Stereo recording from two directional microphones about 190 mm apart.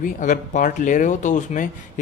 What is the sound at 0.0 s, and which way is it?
Speech, 45° left (ahead or behind).